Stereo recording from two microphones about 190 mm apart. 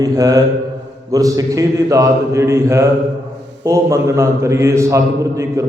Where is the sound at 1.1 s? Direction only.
20° right (ahead or behind).